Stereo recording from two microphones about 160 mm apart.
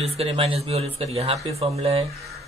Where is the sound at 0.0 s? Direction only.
40° right (ahead or behind).